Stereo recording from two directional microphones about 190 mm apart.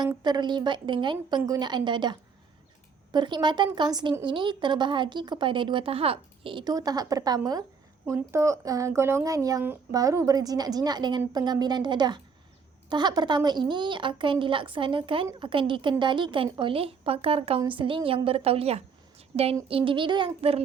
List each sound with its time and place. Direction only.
0.0 s a woman's voice: 20° right (ahead or behind)